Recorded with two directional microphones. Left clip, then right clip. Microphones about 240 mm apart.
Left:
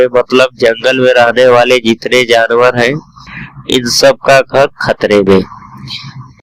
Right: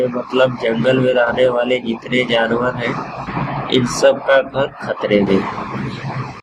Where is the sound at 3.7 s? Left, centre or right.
Left.